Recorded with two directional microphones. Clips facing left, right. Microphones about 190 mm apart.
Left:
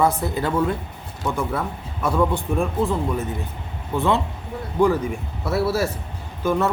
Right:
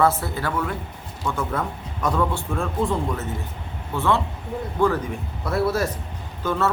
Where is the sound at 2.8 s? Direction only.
5° left (ahead or behind).